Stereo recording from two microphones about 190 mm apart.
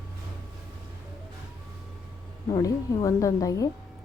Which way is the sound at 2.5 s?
20° left (ahead or behind).